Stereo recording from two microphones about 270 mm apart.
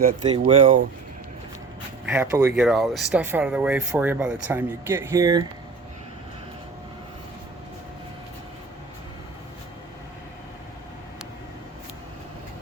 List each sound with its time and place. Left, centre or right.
0.0 s speech: centre
2.0 s speech: centre